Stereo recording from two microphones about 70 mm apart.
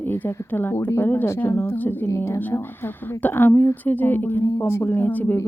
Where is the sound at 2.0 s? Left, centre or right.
Left.